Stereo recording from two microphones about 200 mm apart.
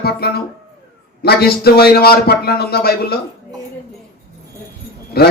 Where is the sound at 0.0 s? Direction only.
50° left (ahead or behind).